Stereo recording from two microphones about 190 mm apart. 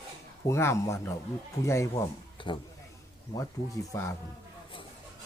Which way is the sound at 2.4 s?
25° left (ahead or behind).